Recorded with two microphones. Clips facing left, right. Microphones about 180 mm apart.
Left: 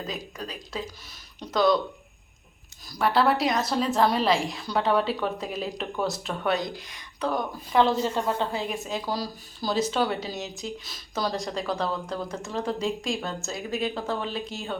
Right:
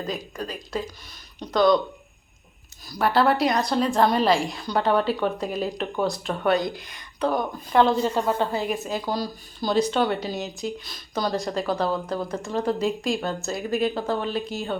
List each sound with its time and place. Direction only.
0.1 s a woman's voice: centre (ahead or behind)
2.9 s a woman's voice: centre (ahead or behind)